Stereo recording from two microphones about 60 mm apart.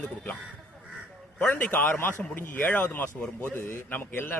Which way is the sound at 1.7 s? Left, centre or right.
Left.